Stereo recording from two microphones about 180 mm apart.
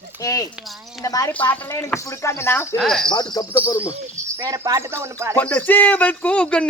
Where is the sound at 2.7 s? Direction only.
Centre (ahead or behind).